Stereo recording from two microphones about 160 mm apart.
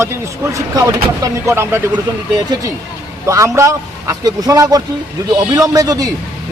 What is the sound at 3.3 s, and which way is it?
Speech, 20° right (ahead or behind).